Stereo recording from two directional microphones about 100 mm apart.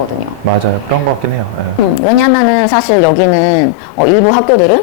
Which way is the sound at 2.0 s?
20° left (ahead or behind).